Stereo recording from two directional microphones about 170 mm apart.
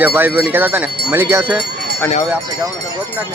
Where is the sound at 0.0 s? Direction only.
10° right (ahead or behind).